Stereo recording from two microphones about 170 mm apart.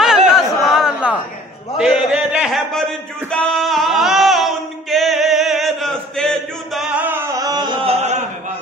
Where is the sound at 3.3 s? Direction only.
Centre (ahead or behind).